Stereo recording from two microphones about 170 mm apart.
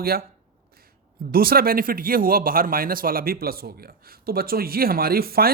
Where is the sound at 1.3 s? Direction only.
60° right (ahead or behind).